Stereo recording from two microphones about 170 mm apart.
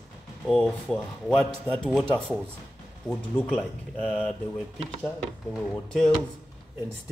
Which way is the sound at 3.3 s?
5° left (ahead or behind).